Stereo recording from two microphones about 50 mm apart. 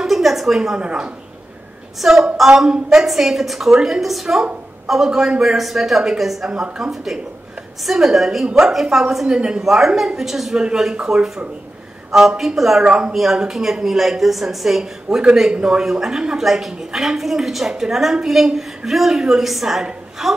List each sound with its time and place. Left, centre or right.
0.0 s a sound: centre
0.7 s a woman's voice: centre
2.0 s a woman's voice: centre
5.6 s a woman's voice: centre
8.7 s a woman's voice: centre